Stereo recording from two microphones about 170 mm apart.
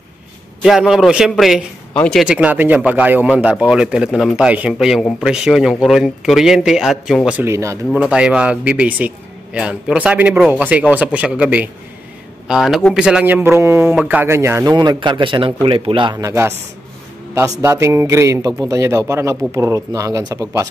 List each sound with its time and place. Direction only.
0.6 s a man's voice: 5° right (ahead or behind)
7.4 s speech: 15° right (ahead or behind)
8.0 s a man's voice: 5° right (ahead or behind)